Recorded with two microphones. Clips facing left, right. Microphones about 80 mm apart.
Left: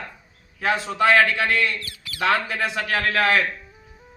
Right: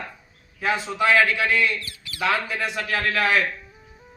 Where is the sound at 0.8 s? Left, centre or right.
Left.